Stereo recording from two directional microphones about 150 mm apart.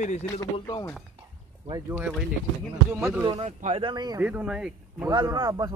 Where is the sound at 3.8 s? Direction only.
25° right (ahead or behind).